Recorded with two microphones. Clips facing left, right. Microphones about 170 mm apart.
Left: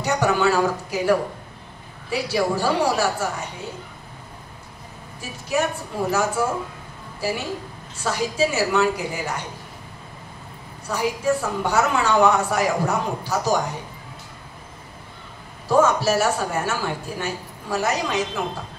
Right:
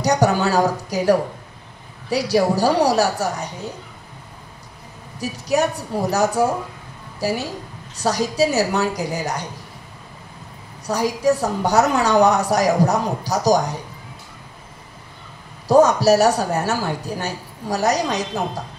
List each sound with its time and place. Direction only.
0.0 s a woman's voice: 40° right (ahead or behind)
5.2 s a woman's voice: 40° right (ahead or behind)
10.9 s a woman's voice: 40° right (ahead or behind)
15.7 s a woman's voice: 40° right (ahead or behind)